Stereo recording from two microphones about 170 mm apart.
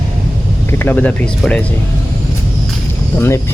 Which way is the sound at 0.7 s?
10° left (ahead or behind).